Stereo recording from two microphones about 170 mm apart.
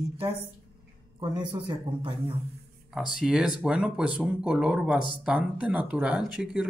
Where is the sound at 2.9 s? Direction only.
5° right (ahead or behind).